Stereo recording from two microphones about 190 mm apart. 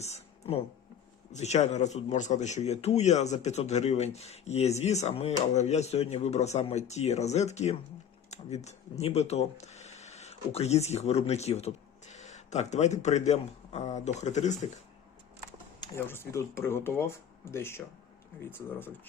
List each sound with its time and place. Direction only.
0.0 s a sound: 35° left (ahead or behind)
1.3 s a man's voice: 35° left (ahead or behind)
16.0 s speech: 10° left (ahead or behind)